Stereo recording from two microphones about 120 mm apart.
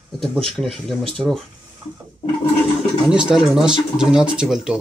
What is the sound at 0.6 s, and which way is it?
Speech, 5° left (ahead or behind).